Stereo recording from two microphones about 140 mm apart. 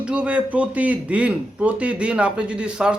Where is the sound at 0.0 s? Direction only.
10° right (ahead or behind).